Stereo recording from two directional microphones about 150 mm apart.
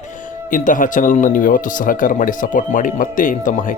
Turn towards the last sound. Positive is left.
turn(degrees=60)  # may be behind; listen again after turning